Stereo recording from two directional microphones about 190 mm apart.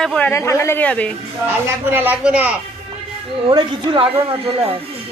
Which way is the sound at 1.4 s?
10° right (ahead or behind).